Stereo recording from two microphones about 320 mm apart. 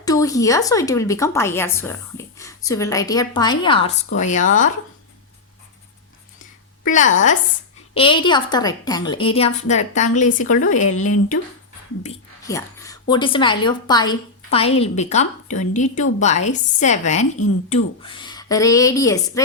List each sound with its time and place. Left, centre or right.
0.0 s a woman's voice: centre
6.8 s a woman's voice: left
12.0 s a woman's voice: centre